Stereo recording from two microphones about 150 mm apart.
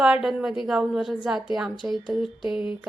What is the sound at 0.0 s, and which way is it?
Speech, 5° right (ahead or behind).